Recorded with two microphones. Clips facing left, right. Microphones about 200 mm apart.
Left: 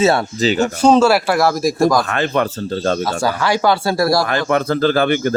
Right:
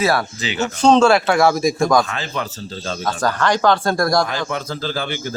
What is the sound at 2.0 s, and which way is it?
Speech, 60° left (ahead or behind).